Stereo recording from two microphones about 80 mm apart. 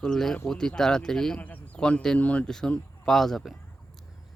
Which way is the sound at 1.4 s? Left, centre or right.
Centre.